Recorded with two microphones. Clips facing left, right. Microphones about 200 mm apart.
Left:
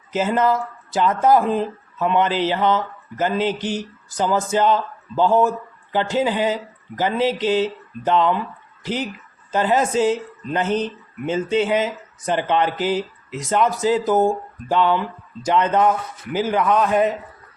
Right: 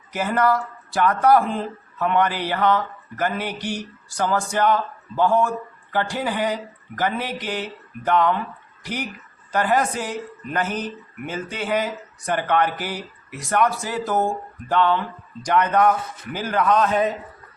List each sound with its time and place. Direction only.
0.1 s speech: 20° left (ahead or behind)
9.5 s speech: 20° left (ahead or behind)